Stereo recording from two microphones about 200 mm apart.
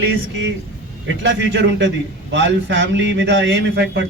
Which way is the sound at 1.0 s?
60° right (ahead or behind).